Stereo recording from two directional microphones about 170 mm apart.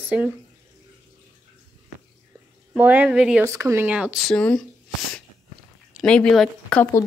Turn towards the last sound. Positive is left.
turn(degrees=5)  # may be behind; listen again after turning